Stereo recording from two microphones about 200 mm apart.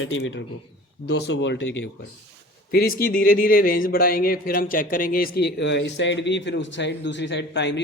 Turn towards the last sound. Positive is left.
turn(degrees=60)  # may be behind; listen again after turning